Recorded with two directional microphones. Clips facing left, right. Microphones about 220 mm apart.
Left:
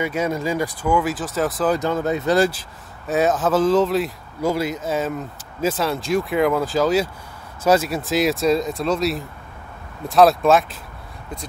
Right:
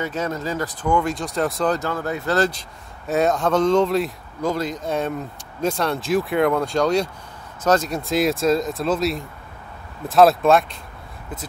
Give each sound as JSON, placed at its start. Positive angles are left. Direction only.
{"t": 0.0, "sound": "speech", "side_deg": 10}
{"t": 1.8, "sound": "speech", "side_deg": 20}
{"t": 2.3, "sound": "speech", "side_deg": 10}